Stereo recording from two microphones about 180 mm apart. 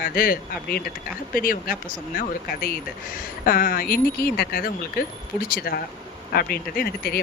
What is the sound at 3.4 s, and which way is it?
Speech, 50° left (ahead or behind).